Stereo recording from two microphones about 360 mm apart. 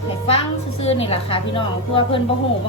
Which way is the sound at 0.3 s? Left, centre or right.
Centre.